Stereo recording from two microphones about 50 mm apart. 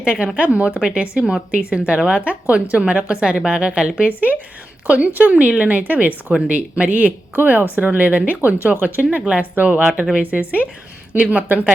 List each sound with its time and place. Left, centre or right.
0.0 s a woman's voice: centre
4.1 s a woman's voice: right
8.4 s speech: right